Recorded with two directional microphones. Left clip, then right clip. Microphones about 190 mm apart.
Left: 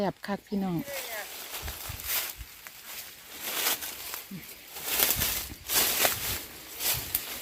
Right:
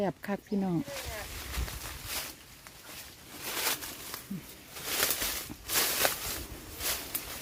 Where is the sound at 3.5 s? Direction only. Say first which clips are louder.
Left 2 dB; 55° left (ahead or behind).